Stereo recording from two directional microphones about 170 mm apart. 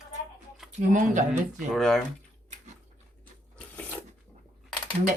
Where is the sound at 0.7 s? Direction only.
45° right (ahead or behind).